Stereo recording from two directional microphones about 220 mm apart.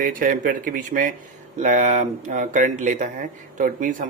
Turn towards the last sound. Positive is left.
turn(degrees=-35)  # may be behind; listen again after turning